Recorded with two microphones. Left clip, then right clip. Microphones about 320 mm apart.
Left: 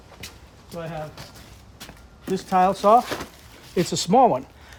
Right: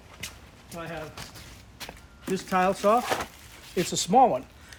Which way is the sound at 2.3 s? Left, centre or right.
Left.